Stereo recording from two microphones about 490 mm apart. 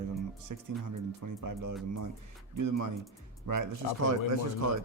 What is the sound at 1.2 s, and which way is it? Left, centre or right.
Speech, right.